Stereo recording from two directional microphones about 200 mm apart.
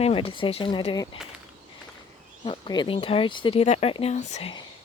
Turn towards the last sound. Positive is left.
turn(degrees=35)  # may be behind; listen again after turning